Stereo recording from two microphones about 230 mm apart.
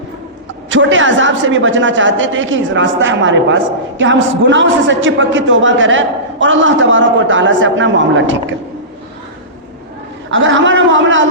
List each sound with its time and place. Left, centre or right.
0.7 s a woman's voice: right
10.2 s a woman's voice: right